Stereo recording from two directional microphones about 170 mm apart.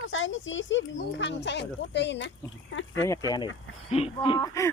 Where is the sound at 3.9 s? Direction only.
30° left (ahead or behind).